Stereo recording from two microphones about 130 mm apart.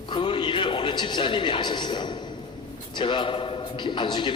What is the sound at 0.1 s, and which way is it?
A man's voice, 40° left (ahead or behind).